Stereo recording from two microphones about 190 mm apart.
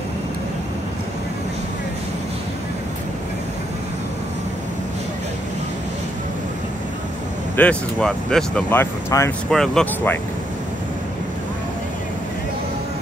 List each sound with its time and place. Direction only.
7.5 s speech: 5° left (ahead or behind)